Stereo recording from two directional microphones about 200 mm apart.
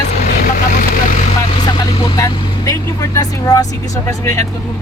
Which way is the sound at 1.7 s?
20° left (ahead or behind).